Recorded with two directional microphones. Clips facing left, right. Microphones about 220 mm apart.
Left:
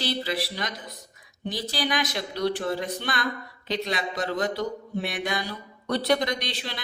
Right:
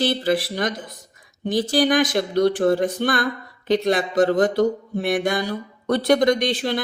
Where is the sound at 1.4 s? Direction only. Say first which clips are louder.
Right 10 dB; 50° right (ahead or behind).